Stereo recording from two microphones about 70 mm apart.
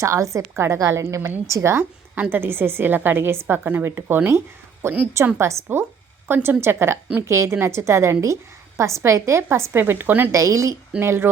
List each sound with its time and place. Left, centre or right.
0.0 s a woman's voice: right
2.3 s a woman's voice: right
10.3 s a woman's voice: right
11.0 s a woman's voice: right